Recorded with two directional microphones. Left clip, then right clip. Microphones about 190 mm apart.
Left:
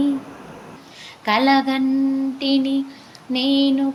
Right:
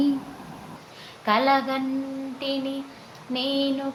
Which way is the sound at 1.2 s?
35° left (ahead or behind).